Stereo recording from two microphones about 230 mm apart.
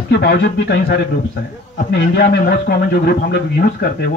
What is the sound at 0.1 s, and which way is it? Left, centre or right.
Speech, left.